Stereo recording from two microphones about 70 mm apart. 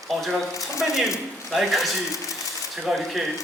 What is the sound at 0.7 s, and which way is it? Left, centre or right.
Speech, left.